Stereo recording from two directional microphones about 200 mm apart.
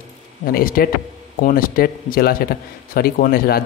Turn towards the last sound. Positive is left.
turn(degrees=45)  # may be behind; listen again after turning